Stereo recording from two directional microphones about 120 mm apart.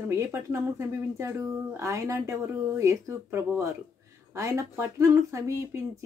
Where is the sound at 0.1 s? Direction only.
25° right (ahead or behind).